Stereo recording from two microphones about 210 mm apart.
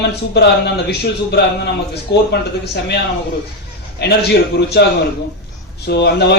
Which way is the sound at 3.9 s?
50° left (ahead or behind).